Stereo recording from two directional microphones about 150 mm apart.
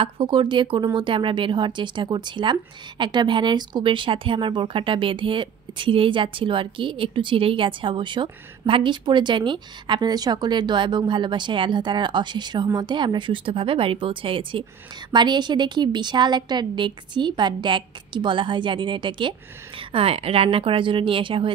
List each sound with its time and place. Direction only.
0.0 s speech: 35° right (ahead or behind)